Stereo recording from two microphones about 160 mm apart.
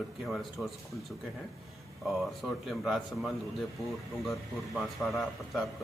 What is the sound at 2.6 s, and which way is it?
Speech, centre (ahead or behind).